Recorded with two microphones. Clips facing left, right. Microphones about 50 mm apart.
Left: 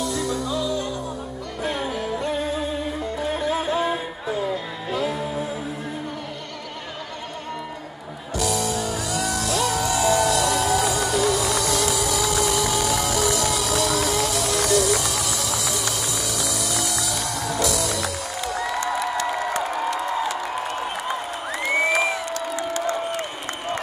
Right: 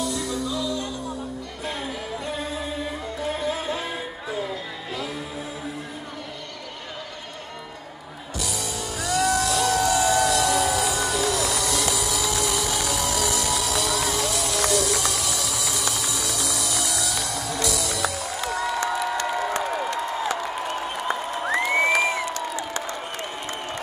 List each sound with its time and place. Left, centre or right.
0.0 s music: centre
1.6 s music: centre
1.9 s music: centre
3.4 s music: centre
8.4 s music: centre
18.9 s crowd: centre